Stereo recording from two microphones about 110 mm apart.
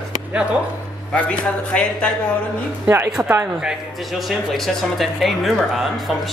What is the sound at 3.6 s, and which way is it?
Speech, 5° right (ahead or behind).